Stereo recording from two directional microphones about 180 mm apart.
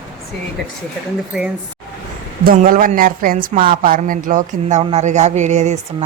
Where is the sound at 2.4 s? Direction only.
50° right (ahead or behind).